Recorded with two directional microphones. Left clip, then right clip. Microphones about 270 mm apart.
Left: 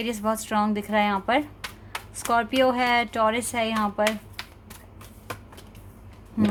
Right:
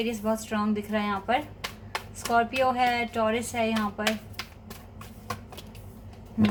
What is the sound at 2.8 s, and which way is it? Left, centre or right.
A woman's voice, left.